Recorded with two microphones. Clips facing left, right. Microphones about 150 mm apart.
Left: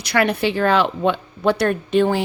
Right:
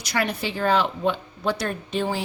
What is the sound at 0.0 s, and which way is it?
Speech, 65° left (ahead or behind).